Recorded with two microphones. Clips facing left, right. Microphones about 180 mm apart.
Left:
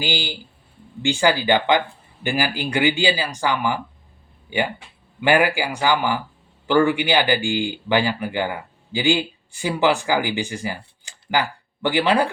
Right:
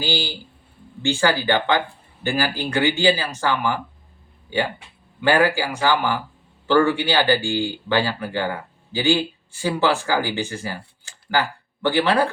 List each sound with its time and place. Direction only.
0.0 s speech: 15° left (ahead or behind)